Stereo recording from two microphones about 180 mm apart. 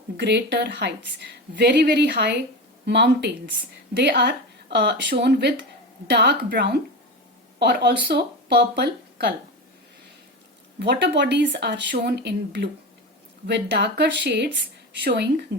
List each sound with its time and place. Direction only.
0.2 s a woman's voice: 70° right (ahead or behind)
10.8 s a woman's voice: 70° right (ahead or behind)
15.0 s a woman's voice: 65° right (ahead or behind)